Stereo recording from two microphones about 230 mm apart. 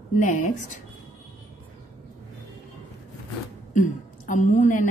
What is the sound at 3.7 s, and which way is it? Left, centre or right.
A woman's voice, left.